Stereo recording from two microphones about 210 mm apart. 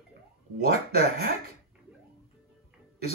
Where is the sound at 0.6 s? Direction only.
45° right (ahead or behind).